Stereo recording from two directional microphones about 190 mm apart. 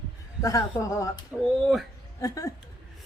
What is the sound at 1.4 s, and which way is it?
Speech, centre (ahead or behind).